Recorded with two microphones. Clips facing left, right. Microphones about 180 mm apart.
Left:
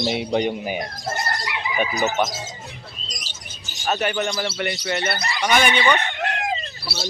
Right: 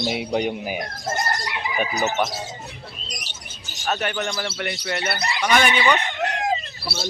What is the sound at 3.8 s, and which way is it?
A man's voice, 5° left (ahead or behind).